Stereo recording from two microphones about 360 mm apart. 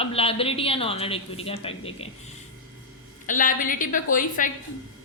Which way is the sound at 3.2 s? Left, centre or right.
Left.